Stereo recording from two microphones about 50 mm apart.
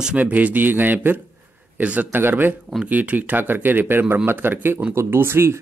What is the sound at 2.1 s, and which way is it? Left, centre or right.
Speech, right.